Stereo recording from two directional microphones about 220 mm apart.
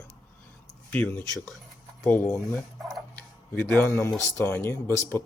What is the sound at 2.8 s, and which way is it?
Tick-tock, centre (ahead or behind).